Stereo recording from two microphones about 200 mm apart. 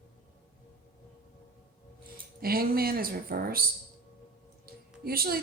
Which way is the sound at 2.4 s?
50° right (ahead or behind).